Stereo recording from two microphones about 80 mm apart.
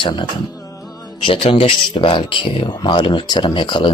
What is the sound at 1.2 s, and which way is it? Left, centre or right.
Speech, left.